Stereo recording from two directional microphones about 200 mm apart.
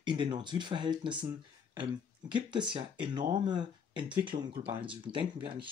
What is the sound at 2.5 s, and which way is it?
Speech, 25° right (ahead or behind).